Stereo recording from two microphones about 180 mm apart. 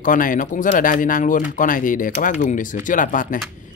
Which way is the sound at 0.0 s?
50° left (ahead or behind).